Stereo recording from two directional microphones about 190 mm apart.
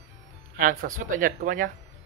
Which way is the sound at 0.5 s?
45° right (ahead or behind).